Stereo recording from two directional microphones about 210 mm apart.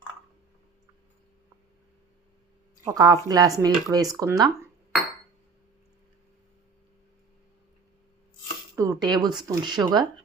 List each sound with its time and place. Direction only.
2.8 s speech: 15° right (ahead or behind)
8.7 s a sound: 15° right (ahead or behind)
9.5 s speech: 15° right (ahead or behind)